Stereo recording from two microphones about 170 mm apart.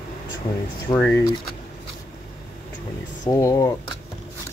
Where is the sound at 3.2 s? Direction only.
20° left (ahead or behind).